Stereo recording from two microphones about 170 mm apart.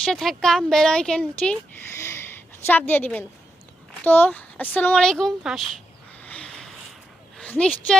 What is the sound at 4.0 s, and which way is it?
Speech, 10° left (ahead or behind).